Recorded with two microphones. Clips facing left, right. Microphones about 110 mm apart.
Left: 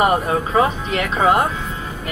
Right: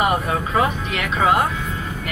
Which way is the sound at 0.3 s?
30° left (ahead or behind).